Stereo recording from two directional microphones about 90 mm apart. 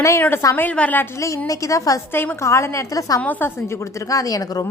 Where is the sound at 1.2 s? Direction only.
35° left (ahead or behind).